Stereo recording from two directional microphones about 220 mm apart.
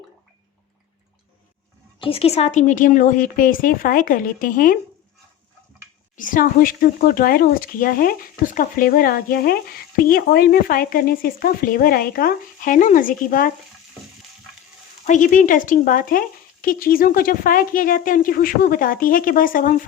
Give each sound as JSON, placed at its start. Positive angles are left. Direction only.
{"t": 2.0, "sound": "speech", "side_deg": 25}
{"t": 6.1, "sound": "speech", "side_deg": 35}
{"t": 15.0, "sound": "speech", "side_deg": 35}